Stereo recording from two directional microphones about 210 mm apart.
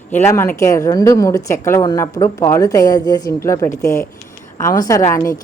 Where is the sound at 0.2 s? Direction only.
10° left (ahead or behind).